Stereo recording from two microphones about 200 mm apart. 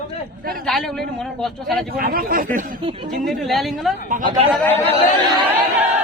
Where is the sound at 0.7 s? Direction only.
Centre (ahead or behind).